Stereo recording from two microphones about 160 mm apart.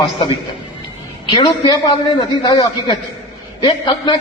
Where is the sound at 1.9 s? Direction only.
30° left (ahead or behind).